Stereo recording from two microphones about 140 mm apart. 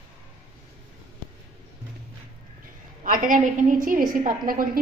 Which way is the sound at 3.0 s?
70° right (ahead or behind).